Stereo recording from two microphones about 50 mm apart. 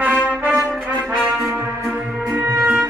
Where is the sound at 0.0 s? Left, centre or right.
Right.